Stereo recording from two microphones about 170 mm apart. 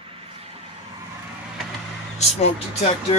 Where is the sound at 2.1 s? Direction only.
40° left (ahead or behind).